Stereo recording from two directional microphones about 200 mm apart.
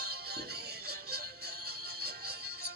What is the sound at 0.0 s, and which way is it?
Music, 55° right (ahead or behind).